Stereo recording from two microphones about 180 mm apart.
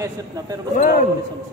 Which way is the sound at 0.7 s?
50° left (ahead or behind).